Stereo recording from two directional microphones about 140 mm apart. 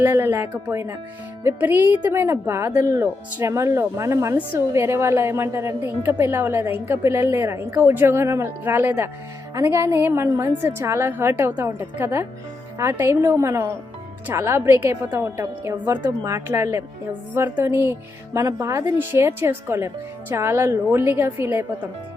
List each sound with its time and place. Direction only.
0.0 s a woman's voice: 15° right (ahead or behind)